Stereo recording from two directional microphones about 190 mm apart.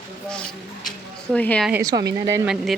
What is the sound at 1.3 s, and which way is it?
Speech, 5° left (ahead or behind).